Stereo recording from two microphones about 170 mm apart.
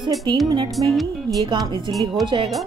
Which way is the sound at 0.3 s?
25° right (ahead or behind).